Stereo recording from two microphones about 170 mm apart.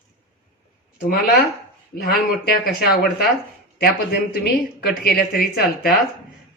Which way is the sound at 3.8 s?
70° left (ahead or behind).